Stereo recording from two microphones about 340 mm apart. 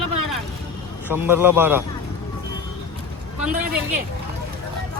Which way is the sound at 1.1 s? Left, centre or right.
Centre.